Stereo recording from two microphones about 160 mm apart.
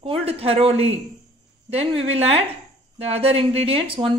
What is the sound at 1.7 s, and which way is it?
A woman's voice, 40° right (ahead or behind).